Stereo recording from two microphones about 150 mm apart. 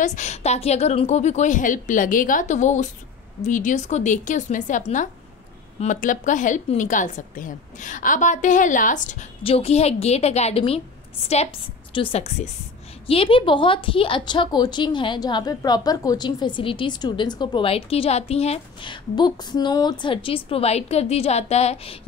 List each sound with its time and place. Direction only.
0.0 s a woman's voice: 55° left (ahead or behind)
9.4 s a woman's voice: 40° left (ahead or behind)